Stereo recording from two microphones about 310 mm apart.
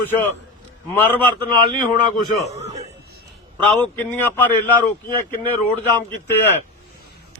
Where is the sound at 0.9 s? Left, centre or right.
Centre.